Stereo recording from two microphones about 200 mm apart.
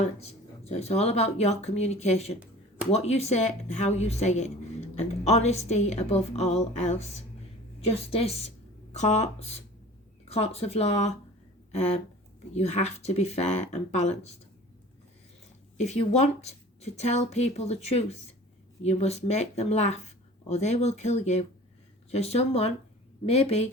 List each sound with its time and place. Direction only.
0.0 s speech: 30° left (ahead or behind)
8.1 s a woman's voice: 30° left (ahead or behind)
15.8 s speech: 35° left (ahead or behind)